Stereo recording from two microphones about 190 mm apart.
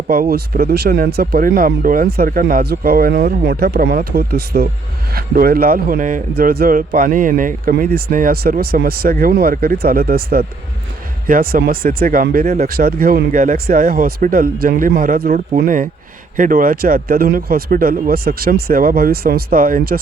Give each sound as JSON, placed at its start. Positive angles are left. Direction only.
{"t": 0.1, "sound": "a man's voice", "side_deg": -55}